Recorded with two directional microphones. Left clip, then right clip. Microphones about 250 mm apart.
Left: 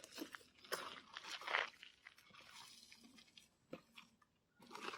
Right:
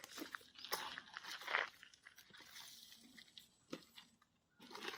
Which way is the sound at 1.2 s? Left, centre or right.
Centre.